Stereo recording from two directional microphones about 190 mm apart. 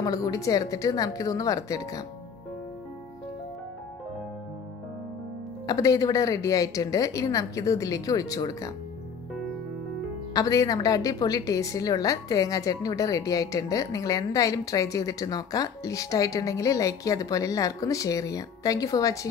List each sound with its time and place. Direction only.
0.0 s a woman's voice: 20° left (ahead or behind)
5.7 s a woman's voice: 15° left (ahead or behind)
10.3 s a woman's voice: 15° left (ahead or behind)